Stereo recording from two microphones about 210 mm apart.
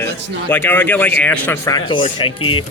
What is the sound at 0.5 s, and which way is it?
Speech, 10° left (ahead or behind).